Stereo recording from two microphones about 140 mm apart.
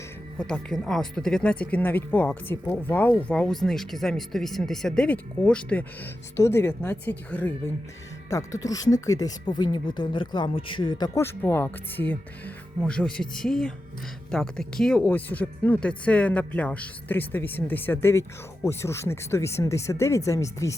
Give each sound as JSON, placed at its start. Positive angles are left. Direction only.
{"t": 0.3, "sound": "speech", "side_deg": 5}
{"t": 6.3, "sound": "speech", "side_deg": 20}
{"t": 8.3, "sound": "speech", "side_deg": 25}
{"t": 11.2, "sound": "speech", "side_deg": 15}